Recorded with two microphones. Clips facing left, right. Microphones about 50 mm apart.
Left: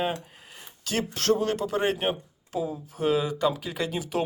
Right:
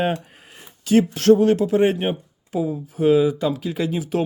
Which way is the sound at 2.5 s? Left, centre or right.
Centre.